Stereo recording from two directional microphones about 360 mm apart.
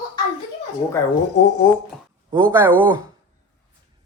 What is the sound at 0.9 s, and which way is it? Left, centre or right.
Speech, centre.